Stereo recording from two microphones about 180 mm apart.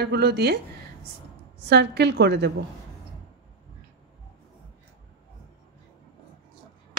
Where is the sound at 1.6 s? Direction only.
65° right (ahead or behind).